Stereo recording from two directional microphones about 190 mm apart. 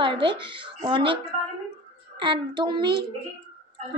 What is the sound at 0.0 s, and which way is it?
Speech, 25° right (ahead or behind).